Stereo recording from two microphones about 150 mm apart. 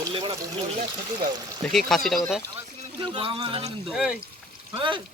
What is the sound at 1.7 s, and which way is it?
Speech, 5° left (ahead or behind).